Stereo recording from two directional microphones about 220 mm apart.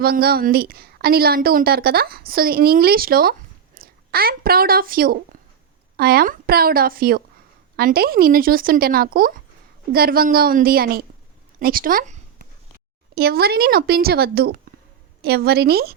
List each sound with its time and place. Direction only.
0.0 s a woman's voice: 45° right (ahead or behind)